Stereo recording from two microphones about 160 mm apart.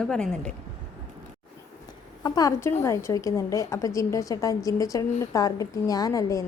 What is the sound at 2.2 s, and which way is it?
A woman's voice, 25° left (ahead or behind).